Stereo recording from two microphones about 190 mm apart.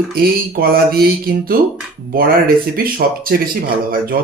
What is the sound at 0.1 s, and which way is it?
Speech, 55° right (ahead or behind).